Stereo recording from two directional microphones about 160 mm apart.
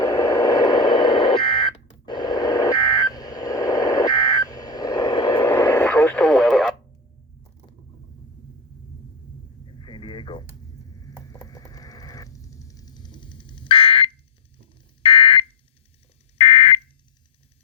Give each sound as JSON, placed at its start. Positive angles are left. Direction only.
{"t": 0.0, "sound": "radio", "side_deg": 20}
{"t": 9.8, "sound": "radio", "side_deg": 30}
{"t": 11.4, "sound": "a sound", "side_deg": 20}
{"t": 15.0, "sound": "smoke detector", "side_deg": 35}